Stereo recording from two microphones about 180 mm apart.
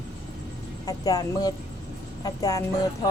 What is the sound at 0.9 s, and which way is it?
Speech, 20° left (ahead or behind).